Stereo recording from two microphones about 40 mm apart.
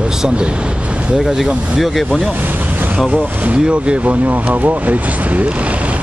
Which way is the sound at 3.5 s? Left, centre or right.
Right.